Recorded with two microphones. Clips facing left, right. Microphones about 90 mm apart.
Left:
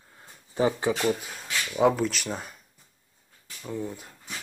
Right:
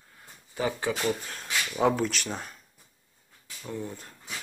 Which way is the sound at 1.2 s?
5° left (ahead or behind).